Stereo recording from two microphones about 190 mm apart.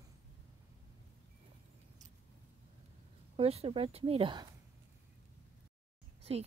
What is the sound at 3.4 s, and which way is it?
Speech, 30° right (ahead or behind).